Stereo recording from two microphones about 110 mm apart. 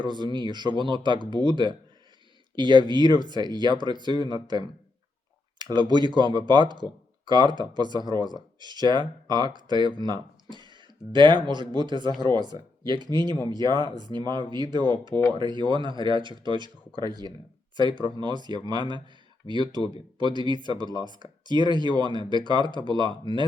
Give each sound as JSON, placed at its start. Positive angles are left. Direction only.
{"t": 0.0, "sound": "speech", "side_deg": -45}
{"t": 5.5, "sound": "a sound", "side_deg": -40}
{"t": 6.1, "sound": "speech", "side_deg": -45}
{"t": 21.0, "sound": "speech", "side_deg": 45}
{"t": 21.4, "sound": "speech", "side_deg": -40}
{"t": 22.6, "sound": "speech", "side_deg": 45}
{"t": 22.9, "sound": "speech", "side_deg": -45}